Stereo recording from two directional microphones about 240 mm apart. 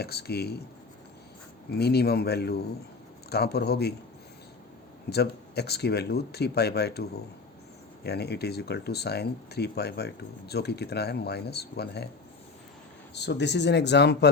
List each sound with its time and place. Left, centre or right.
0.0 s speech: left
1.8 s speech: left
5.0 s speech: left
8.0 s speech: left
13.1 s speech: left